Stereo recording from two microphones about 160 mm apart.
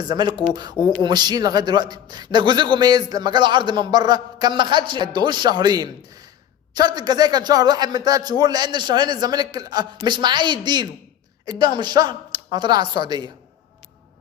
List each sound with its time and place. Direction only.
0.0 s speech: 25° right (ahead or behind)